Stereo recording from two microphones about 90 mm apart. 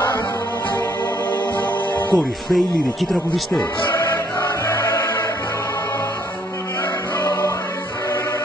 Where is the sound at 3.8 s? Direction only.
40° left (ahead or behind).